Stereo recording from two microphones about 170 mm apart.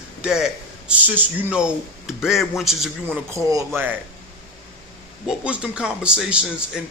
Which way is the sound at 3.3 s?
20° right (ahead or behind).